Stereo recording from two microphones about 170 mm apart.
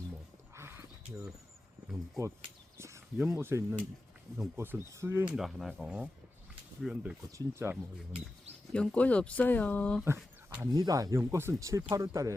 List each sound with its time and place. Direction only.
0.5 s a sound: 15° right (ahead or behind)
2.7 s a sound: 15° right (ahead or behind)
3.3 s speech: 15° right (ahead or behind)
5.3 s speech: centre (ahead or behind)
8.7 s speech: 5° left (ahead or behind)
10.0 s speech: 15° right (ahead or behind)